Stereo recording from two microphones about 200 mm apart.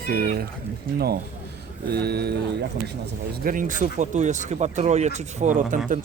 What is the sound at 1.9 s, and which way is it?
Speech, 55° right (ahead or behind).